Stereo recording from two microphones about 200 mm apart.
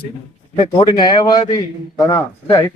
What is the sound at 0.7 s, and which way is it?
A man's voice, 20° left (ahead or behind).